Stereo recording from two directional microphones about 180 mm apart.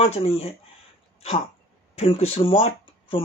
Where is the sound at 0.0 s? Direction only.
30° left (ahead or behind).